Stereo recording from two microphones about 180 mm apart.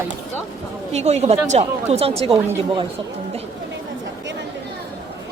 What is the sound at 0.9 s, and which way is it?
Speech, 35° right (ahead or behind).